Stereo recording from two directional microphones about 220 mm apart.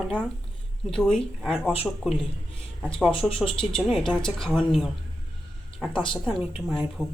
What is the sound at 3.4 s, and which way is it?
Speech, 25° left (ahead or behind).